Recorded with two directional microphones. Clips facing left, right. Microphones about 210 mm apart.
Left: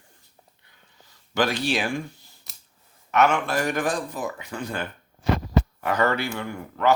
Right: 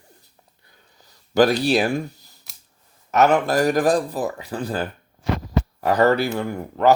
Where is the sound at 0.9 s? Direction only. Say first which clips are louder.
Right 8 dB; 40° right (ahead or behind).